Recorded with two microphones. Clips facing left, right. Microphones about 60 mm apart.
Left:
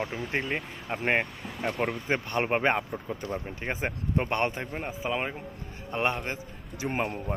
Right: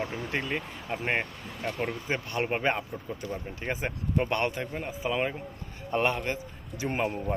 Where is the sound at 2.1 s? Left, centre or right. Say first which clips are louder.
Left 3 dB; left.